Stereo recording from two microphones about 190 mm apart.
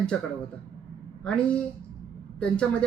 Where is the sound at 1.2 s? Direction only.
5° left (ahead or behind).